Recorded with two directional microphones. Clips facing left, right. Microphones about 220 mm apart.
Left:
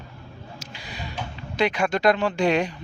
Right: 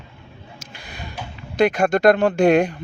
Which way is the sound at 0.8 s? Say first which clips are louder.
Right 1 dB; 55° right (ahead or behind).